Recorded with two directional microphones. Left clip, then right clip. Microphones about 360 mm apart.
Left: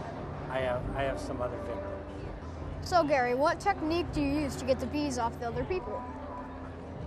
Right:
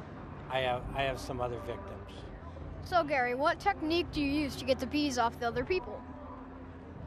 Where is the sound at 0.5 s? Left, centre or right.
Right.